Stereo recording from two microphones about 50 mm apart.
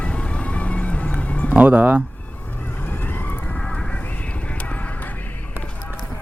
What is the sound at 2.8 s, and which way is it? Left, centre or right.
Vehicle, left.